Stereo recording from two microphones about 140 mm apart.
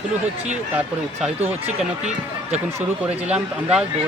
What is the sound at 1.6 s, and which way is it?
Speech, 50° right (ahead or behind).